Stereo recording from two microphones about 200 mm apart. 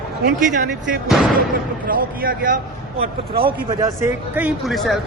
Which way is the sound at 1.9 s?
45° right (ahead or behind).